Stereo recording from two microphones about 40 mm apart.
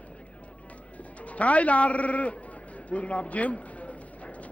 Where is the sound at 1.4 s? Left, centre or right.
Left.